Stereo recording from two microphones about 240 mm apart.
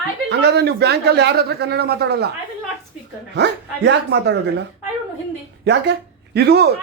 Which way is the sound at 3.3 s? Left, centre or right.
Right.